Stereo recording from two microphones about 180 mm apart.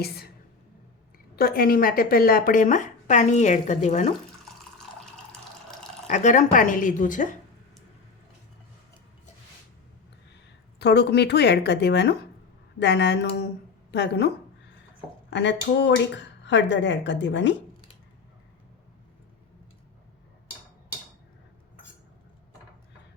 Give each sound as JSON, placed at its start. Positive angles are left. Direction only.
{"t": 1.4, "sound": "a woman's voice", "side_deg": 55}
{"t": 6.1, "sound": "a woman's voice", "side_deg": 45}
{"t": 10.8, "sound": "speech", "side_deg": 70}
{"t": 15.3, "sound": "speech", "side_deg": 75}